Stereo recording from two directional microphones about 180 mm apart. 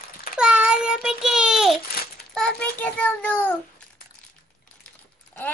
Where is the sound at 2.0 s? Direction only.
60° left (ahead or behind).